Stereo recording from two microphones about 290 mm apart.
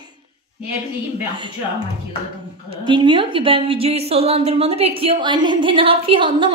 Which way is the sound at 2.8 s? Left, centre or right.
Centre.